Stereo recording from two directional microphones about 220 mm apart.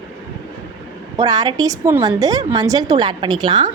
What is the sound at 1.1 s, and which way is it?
A woman's voice, 15° right (ahead or behind).